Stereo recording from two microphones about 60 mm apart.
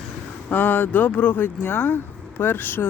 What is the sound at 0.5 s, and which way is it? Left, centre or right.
Speech, left.